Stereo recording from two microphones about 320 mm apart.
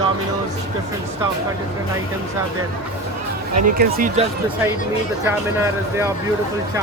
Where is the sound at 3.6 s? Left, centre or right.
Right.